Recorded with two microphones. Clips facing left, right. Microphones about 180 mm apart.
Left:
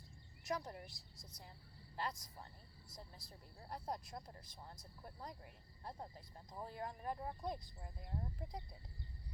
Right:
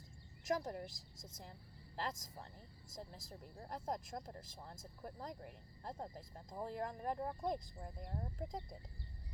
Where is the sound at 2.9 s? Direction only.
45° right (ahead or behind).